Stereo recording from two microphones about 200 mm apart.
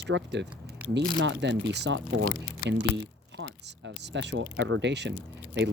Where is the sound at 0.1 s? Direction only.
60° right (ahead or behind).